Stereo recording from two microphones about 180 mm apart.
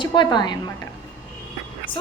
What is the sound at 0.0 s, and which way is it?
Speech, 25° left (ahead or behind).